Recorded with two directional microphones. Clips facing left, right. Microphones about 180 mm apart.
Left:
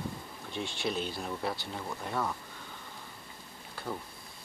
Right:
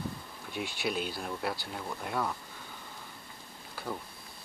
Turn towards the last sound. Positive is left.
turn(degrees=-5)  # may be behind; listen again after turning